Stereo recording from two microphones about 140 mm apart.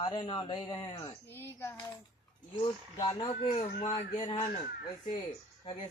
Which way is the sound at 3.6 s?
45° left (ahead or behind).